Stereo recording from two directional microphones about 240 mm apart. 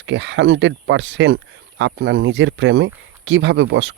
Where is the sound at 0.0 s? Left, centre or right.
Right.